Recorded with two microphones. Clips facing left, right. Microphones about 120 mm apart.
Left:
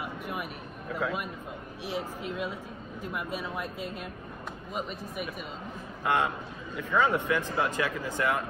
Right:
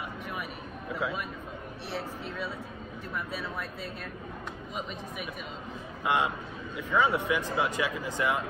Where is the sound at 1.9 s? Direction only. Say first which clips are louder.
Left 3 dB; 15° left (ahead or behind).